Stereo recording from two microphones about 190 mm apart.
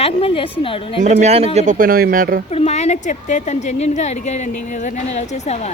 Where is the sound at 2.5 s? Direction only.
35° left (ahead or behind).